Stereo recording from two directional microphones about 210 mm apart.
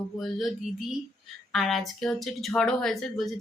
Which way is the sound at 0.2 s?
Centre (ahead or behind).